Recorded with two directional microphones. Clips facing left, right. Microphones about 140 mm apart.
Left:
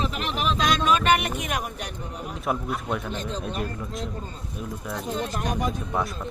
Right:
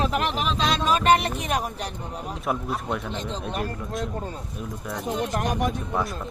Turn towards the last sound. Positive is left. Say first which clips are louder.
# even
turn(degrees=0)  # may be behind; listen again after turning